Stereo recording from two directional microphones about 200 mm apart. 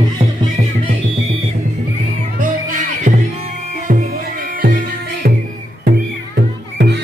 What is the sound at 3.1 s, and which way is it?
Music, 40° right (ahead or behind).